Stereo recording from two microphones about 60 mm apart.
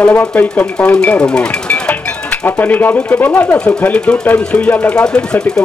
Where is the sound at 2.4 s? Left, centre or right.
Left.